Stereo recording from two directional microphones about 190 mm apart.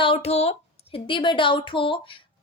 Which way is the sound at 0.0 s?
30° left (ahead or behind).